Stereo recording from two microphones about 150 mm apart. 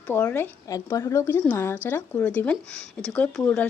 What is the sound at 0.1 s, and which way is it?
Speech, 15° left (ahead or behind).